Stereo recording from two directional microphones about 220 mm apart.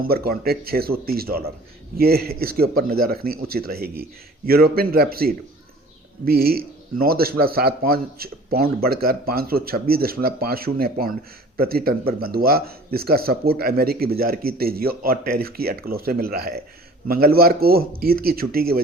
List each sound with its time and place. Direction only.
0.0 s a man's voice: 45° right (ahead or behind)